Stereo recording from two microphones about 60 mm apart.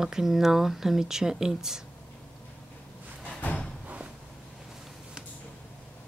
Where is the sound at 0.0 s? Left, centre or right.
Centre.